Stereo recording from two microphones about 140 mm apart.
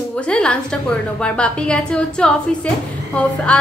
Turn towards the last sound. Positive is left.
turn(degrees=10)  # may be behind; listen again after turning